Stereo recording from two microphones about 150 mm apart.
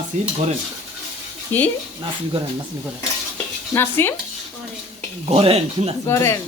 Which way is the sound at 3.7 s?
15° left (ahead or behind).